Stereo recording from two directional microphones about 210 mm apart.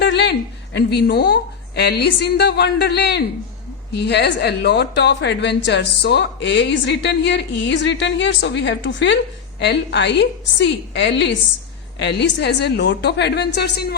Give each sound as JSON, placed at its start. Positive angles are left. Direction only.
{"t": 0.0, "sound": "a woman's voice", "side_deg": 55}